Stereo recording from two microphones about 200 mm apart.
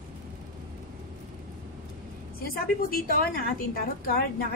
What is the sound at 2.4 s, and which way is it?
A woman's voice, 50° left (ahead or behind).